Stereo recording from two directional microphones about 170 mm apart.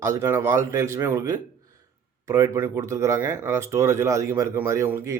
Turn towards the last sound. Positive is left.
turn(degrees=-15)  # may be behind; listen again after turning